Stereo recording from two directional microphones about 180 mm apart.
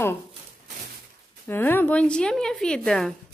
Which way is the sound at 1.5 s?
10° left (ahead or behind).